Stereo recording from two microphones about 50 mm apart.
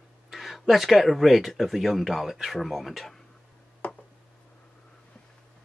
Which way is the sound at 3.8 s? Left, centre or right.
Left.